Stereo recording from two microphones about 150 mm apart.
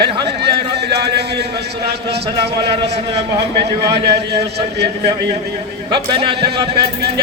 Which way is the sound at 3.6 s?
90° right.